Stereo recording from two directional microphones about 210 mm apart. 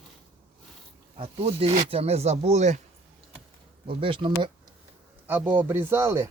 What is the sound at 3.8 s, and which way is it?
Speech, 25° right (ahead or behind).